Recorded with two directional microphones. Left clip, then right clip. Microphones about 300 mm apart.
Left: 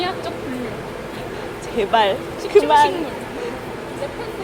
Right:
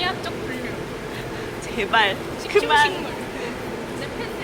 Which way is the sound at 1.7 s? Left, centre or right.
Centre.